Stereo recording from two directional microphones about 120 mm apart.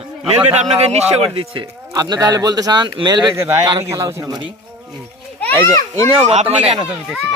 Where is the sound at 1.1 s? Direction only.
55° right (ahead or behind).